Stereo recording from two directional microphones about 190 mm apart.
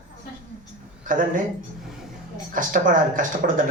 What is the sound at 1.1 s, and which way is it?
Speech, 45° right (ahead or behind).